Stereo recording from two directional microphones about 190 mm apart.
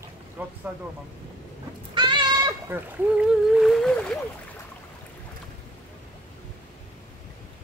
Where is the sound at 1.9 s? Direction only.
25° right (ahead or behind); by 4.1 s 5° left (ahead or behind).